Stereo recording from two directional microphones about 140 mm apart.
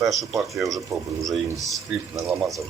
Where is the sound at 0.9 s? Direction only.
20° right (ahead or behind).